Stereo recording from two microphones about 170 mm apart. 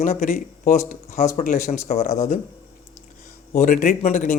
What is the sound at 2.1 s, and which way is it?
Speech, 40° left (ahead or behind).